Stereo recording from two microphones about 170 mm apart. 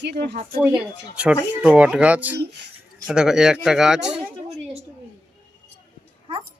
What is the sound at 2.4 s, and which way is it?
Speech, 90° right.